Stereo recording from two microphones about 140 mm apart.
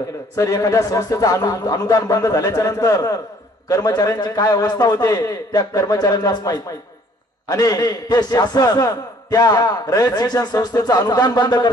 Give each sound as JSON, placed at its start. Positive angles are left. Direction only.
{"t": 0.4, "sound": "a man's voice", "side_deg": 25}